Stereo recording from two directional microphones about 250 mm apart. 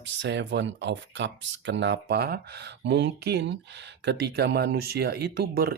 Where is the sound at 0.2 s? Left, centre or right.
Right.